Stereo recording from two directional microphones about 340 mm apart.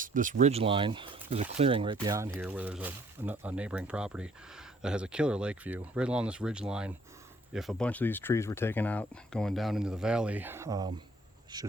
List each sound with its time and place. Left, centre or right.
0.0 s speech: right